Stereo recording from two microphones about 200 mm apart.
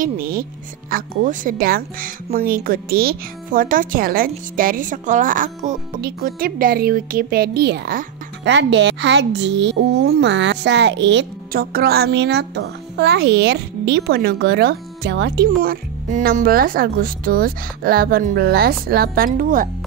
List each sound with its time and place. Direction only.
0.0 s a woman's voice: 45° right (ahead or behind)